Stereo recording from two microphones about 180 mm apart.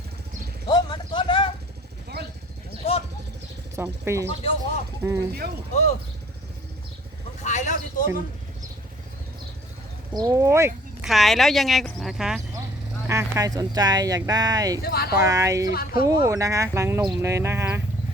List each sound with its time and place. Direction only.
0.7 s a sound: 25° left (ahead or behind)
2.1 s a sound: 60° right (ahead or behind)
2.8 s vehicle: 30° left (ahead or behind)
3.8 s speech: 15° right (ahead or behind)
7.4 s a sound: 40° left (ahead or behind)
10.2 s speech: 20° right (ahead or behind)
11.0 s speech: centre (ahead or behind)
13.1 s speech: 15° right (ahead or behind)
14.8 s speech: 60° left (ahead or behind)
15.2 s speech: 15° right (ahead or behind)
15.7 s speech: 55° left (ahead or behind)
16.0 s speech: 15° right (ahead or behind)